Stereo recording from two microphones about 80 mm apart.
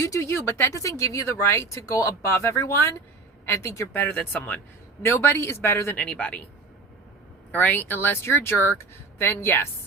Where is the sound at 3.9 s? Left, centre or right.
Left.